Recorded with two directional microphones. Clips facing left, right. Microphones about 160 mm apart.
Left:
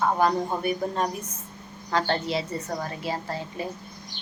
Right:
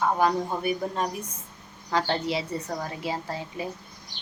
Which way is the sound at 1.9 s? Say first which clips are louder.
Left 1 dB; 10° right (ahead or behind).